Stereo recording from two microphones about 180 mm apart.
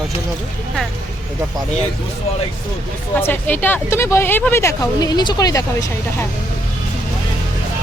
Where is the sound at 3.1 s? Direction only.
10° left (ahead or behind).